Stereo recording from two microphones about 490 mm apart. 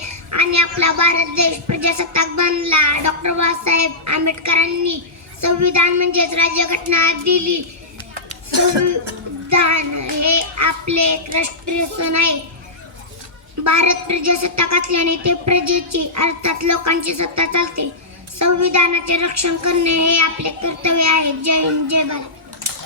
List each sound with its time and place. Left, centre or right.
0.3 s a woman's voice: right
9.5 s a child's voice: right
13.7 s a woman's voice: right